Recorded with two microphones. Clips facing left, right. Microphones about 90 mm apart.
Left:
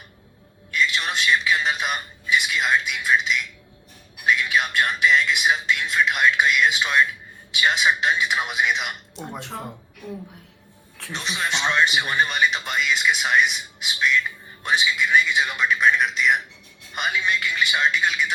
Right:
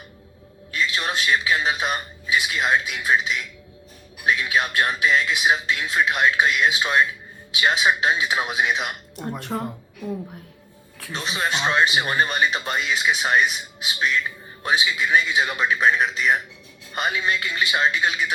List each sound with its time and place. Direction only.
0.7 s a man's voice: 40° right (ahead or behind)
9.5 s speech: 25° right (ahead or behind)
11.1 s speech: 40° right (ahead or behind)